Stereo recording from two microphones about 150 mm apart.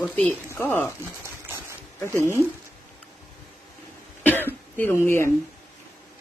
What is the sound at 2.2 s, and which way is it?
Speech, 20° right (ahead or behind).